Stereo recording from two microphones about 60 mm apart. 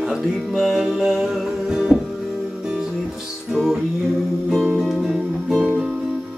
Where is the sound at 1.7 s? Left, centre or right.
Centre.